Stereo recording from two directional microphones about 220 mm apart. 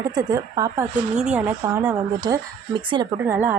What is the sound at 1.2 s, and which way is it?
Speech, 5° right (ahead or behind).